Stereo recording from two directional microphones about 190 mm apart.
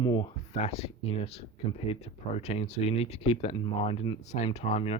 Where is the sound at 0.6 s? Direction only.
30° left (ahead or behind).